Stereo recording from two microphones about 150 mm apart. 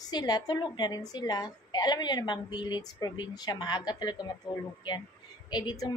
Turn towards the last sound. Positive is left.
turn(degrees=25)  # may be behind; listen again after turning